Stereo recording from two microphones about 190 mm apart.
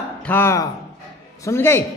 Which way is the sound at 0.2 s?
10° left (ahead or behind).